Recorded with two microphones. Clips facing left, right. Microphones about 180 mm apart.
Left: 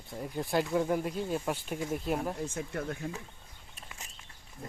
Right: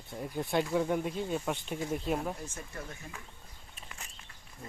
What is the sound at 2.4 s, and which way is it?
Speech, 60° left (ahead or behind).